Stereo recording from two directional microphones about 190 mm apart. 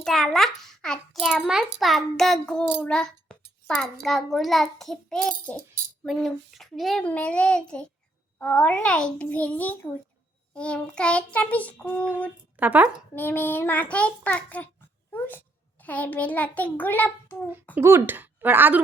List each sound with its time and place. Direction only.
0.0 s a child's voice: centre (ahead or behind)
2.8 s a sound: 5° left (ahead or behind)
4.0 s a child's voice: centre (ahead or behind)
12.5 s speech: 10° right (ahead or behind)
13.1 s a child's voice: 10° left (ahead or behind)
17.7 s speech: 10° right (ahead or behind)